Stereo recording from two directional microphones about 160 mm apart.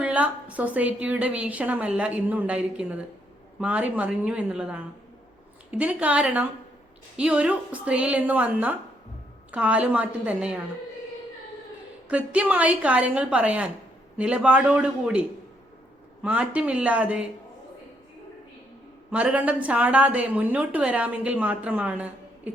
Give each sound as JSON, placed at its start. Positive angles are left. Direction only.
{"t": 0.0, "sound": "a woman's voice", "side_deg": -10}
{"t": 12.0, "sound": "a woman's voice", "side_deg": -10}
{"t": 16.2, "sound": "a woman's voice", "side_deg": -10}
{"t": 19.1, "sound": "a woman's voice", "side_deg": -10}
{"t": 22.5, "sound": "a sound", "side_deg": -10}